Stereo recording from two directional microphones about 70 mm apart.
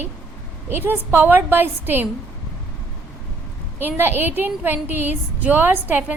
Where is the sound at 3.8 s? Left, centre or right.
Right.